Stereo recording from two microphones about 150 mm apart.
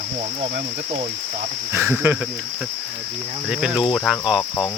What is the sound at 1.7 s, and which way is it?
Cricket, 15° right (ahead or behind).